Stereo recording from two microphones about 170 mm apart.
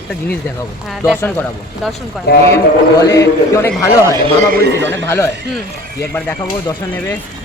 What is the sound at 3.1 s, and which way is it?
A man's voice, 20° left (ahead or behind).